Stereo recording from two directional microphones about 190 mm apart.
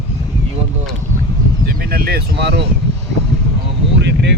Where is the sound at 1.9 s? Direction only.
55° right (ahead or behind).